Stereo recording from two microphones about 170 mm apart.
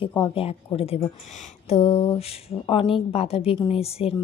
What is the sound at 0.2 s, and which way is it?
A woman's voice, 35° left (ahead or behind).